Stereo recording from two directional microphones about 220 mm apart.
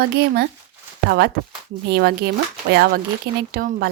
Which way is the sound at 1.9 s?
45° right (ahead or behind).